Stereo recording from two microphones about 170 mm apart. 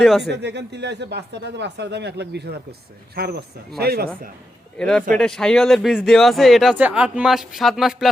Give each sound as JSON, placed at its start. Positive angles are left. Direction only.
{"t": 0.2, "sound": "speech", "side_deg": -85}
{"t": 3.2, "sound": "a man's voice", "side_deg": -65}
{"t": 4.8, "sound": "speech", "side_deg": 5}